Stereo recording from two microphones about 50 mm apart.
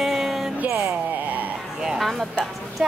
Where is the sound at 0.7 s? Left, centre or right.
Right.